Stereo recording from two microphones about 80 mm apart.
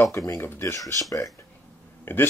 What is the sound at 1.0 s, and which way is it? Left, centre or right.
Speech, left.